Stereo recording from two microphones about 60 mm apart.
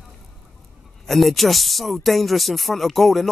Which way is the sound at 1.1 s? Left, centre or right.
Centre.